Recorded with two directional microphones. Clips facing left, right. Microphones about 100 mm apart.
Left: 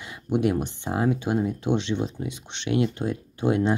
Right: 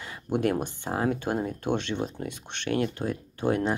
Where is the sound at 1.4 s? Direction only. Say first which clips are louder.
Left 3 dB; 50° right (ahead or behind).